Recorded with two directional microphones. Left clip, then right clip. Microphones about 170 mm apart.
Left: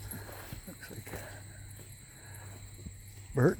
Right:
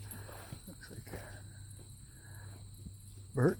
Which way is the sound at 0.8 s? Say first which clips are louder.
Left 4 dB; 15° left (ahead or behind).